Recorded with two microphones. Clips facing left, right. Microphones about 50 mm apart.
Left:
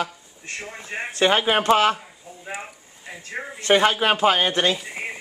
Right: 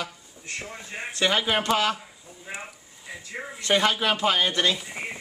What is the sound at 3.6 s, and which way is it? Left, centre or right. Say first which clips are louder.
Speech: left 5 dB; left.